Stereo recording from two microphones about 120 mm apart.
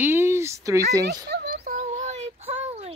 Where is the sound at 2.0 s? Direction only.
65° right (ahead or behind).